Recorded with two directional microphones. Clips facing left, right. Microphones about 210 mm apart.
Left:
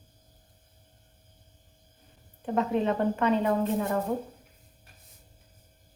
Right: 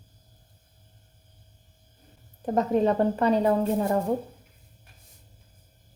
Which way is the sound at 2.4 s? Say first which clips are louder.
Right 4 dB; 40° right (ahead or behind).